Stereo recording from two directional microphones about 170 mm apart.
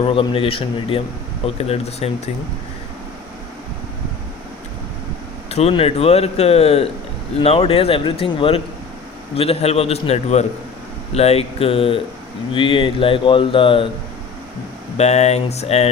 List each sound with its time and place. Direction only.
0.0 s speech: 30° left (ahead or behind)
5.5 s speech: 35° left (ahead or behind)
14.9 s speech: 40° left (ahead or behind)